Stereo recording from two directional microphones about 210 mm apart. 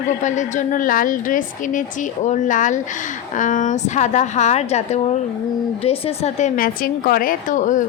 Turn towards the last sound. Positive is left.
turn(degrees=35)  # may be behind; listen again after turning